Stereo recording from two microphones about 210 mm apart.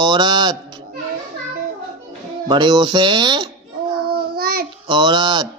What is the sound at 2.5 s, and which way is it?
Speech, 20° right (ahead or behind).